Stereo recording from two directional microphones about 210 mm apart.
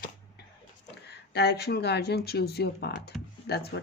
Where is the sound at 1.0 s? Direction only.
55° left (ahead or behind).